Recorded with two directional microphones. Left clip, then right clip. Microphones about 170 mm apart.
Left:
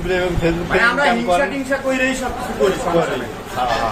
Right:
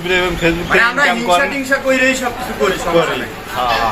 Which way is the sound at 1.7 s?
5° left (ahead or behind).